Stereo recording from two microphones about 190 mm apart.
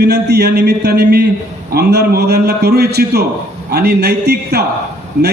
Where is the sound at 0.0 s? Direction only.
60° right (ahead or behind).